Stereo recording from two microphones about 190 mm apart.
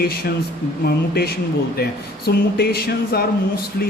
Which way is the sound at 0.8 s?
55° left (ahead or behind).